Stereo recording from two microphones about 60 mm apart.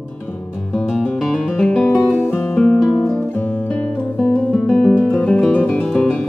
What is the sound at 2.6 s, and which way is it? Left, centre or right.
Music, centre.